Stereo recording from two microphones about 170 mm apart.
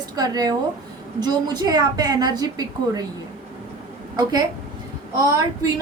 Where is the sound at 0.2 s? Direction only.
25° right (ahead or behind).